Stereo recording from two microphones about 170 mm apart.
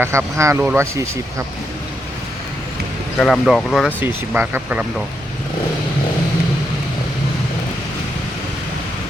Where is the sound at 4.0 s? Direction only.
10° right (ahead or behind).